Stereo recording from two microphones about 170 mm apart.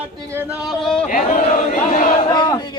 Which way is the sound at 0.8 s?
5° left (ahead or behind).